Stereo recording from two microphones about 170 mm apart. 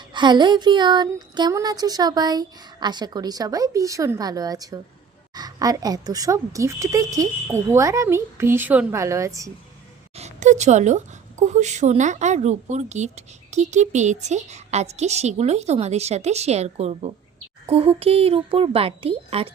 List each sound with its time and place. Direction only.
0.1 s a sound: 25° right (ahead or behind)
5.3 s a woman's voice: 25° right (ahead or behind)
10.2 s a woman's voice: 40° right (ahead or behind)